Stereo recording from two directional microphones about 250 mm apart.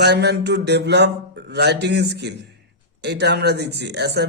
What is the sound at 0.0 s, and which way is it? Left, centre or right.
A man's voice, right.